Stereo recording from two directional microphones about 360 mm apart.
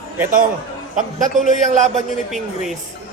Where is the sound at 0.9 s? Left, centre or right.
Right.